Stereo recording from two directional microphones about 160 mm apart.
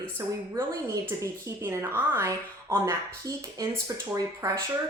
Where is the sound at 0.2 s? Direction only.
20° right (ahead or behind).